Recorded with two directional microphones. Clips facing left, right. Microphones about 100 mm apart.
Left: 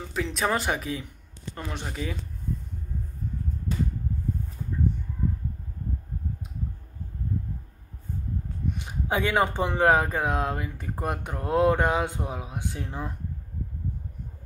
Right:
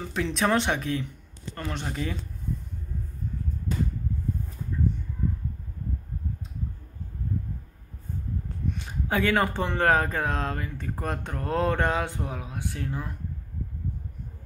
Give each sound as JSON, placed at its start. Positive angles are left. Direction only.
{"t": 0.1, "sound": "speech", "side_deg": 0}
{"t": 8.7, "sound": "speech", "side_deg": 15}